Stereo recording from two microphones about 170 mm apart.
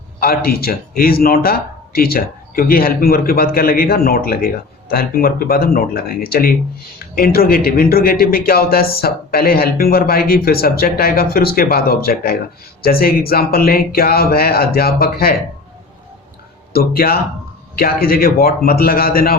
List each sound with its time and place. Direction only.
0.2 s speech: 60° left (ahead or behind)
16.7 s speech: 65° left (ahead or behind)